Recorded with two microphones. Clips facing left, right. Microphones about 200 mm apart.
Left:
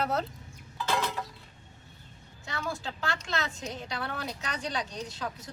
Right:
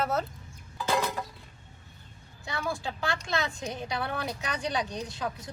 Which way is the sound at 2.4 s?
10° right (ahead or behind).